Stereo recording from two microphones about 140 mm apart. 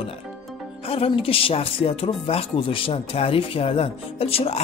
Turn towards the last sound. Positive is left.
turn(degrees=45)  # may be behind; listen again after turning